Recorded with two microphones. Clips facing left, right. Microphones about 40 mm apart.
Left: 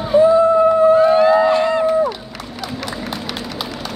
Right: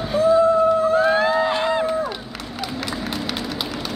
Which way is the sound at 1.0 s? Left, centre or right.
Centre.